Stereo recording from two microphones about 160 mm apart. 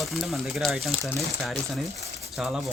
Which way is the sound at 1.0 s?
20° right (ahead or behind).